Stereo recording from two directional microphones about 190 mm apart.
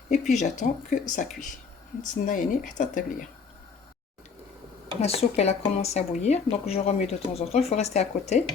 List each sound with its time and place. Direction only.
0.1 s speech: 40° left (ahead or behind)
4.9 s speech: 35° left (ahead or behind)